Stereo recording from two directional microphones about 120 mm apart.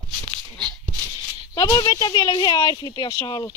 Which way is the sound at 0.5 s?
40° right (ahead or behind).